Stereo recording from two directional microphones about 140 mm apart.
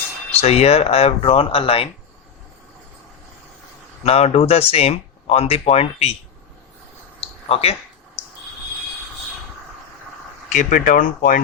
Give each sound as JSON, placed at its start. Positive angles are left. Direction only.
{"t": 0.3, "sound": "speech", "side_deg": 45}
{"t": 4.0, "sound": "speech", "side_deg": 45}
{"t": 7.2, "sound": "a sound", "side_deg": 45}
{"t": 10.5, "sound": "speech", "side_deg": 65}